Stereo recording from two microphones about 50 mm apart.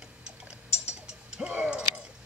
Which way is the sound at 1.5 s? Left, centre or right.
Right.